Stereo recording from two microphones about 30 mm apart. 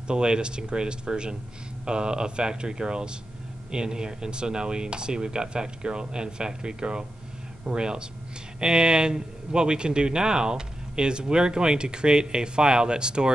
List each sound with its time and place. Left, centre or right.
0.1 s a man's voice: right